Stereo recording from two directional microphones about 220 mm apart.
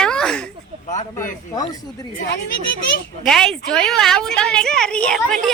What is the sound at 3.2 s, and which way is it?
A woman's voice, centre (ahead or behind).